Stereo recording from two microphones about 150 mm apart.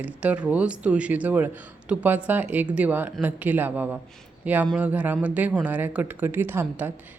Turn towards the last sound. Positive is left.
turn(degrees=-15)  # may be behind; listen again after turning